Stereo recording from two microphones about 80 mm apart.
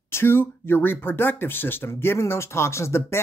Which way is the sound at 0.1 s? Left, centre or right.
Left.